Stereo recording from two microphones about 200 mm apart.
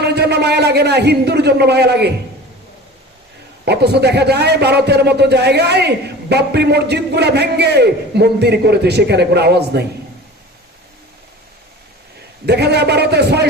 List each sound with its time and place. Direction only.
0.0 s a man's voice: 55° right (ahead or behind)
3.7 s a man's voice: 55° right (ahead or behind)
12.5 s a man's voice: 55° right (ahead or behind)